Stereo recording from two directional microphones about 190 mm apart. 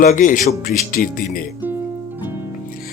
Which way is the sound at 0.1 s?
45° left (ahead or behind).